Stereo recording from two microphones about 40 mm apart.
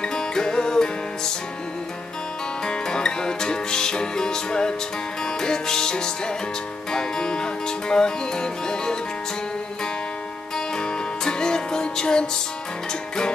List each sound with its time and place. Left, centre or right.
0.0 s music: centre
2.6 s music: centre
10.8 s music: centre